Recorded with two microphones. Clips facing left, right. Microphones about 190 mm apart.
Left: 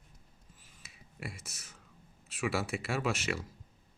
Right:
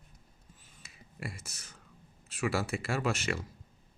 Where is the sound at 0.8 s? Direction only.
Centre (ahead or behind).